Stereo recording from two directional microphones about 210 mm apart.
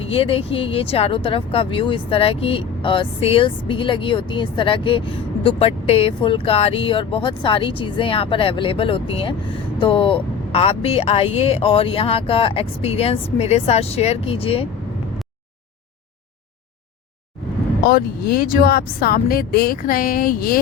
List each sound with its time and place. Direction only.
0.1 s speech: 25° left (ahead or behind)
17.8 s speech: 45° left (ahead or behind)